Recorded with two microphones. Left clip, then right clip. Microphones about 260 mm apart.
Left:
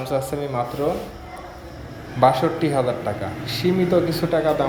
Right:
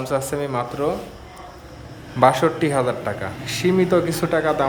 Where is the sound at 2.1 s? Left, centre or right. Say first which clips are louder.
Right 1 dB; centre.